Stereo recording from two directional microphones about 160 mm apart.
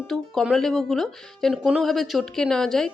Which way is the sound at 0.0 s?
Centre (ahead or behind).